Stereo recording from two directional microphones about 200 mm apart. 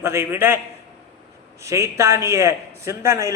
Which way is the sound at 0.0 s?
15° right (ahead or behind).